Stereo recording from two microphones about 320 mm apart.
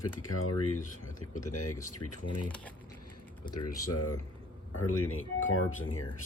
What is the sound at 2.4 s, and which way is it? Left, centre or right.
Speech, centre.